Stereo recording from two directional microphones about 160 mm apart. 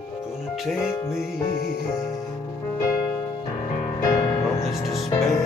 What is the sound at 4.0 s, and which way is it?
Music, 20° left (ahead or behind).